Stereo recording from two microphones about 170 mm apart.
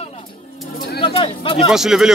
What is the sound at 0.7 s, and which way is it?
Bird, 65° left (ahead or behind).